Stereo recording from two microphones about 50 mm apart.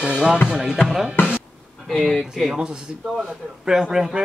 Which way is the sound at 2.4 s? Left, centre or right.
Centre.